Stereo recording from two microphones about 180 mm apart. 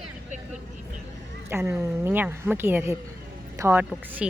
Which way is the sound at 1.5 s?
15° right (ahead or behind).